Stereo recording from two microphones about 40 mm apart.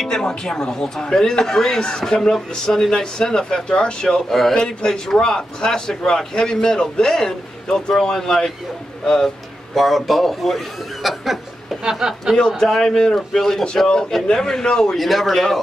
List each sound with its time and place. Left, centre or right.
0.0 s speech: centre
4.3 s a man's voice: centre
4.6 s speech: centre
11.8 s speech: centre
12.4 s speech: centre
15.0 s a man's voice: centre